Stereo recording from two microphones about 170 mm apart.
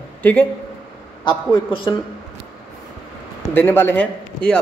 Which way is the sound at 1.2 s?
30° left (ahead or behind).